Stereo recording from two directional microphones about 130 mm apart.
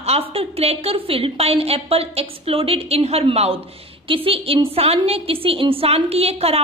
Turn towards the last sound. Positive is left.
turn(degrees=-50)  # may be behind; listen again after turning